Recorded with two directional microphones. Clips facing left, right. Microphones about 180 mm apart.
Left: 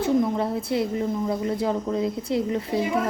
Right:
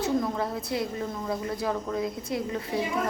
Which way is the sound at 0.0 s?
25° left (ahead or behind).